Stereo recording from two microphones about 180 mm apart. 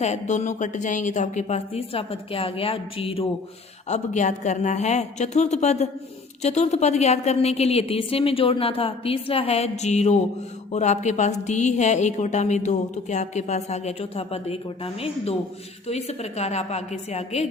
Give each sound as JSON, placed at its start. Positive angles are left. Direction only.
{"t": 0.0, "sound": "a woman's voice", "side_deg": 40}